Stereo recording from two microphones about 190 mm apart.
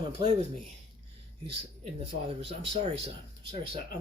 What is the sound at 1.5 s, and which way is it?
A man's voice, 30° right (ahead or behind).